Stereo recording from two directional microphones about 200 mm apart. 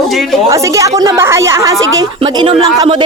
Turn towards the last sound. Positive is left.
turn(degrees=-25)  # may be behind; listen again after turning